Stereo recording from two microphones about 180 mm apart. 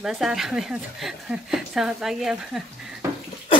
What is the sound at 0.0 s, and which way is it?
A woman's voice, 5° right (ahead or behind).